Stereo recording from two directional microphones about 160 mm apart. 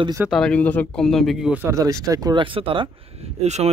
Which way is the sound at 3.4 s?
45° right (ahead or behind).